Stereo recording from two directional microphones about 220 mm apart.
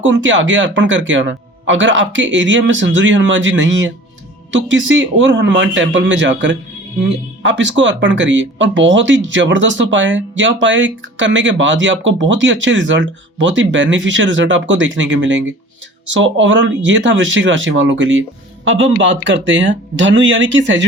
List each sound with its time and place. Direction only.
0.0 s speech: 60° right (ahead or behind)